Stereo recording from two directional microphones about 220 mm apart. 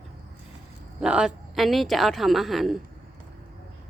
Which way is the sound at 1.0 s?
5° right (ahead or behind).